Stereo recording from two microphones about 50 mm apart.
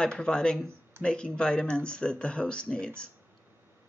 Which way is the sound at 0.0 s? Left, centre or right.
Centre.